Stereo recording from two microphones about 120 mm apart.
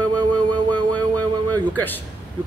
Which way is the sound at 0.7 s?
15° left (ahead or behind).